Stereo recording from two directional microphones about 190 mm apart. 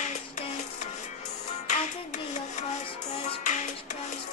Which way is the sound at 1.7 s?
40° left (ahead or behind).